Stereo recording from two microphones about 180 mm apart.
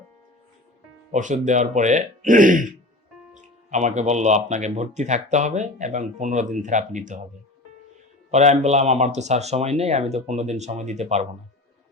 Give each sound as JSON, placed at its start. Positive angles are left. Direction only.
{"t": 1.1, "sound": "speech", "side_deg": -45}
{"t": 8.3, "sound": "speech", "side_deg": -40}